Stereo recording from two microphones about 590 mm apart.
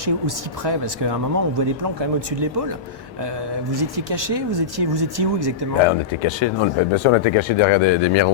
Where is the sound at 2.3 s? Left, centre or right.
Right.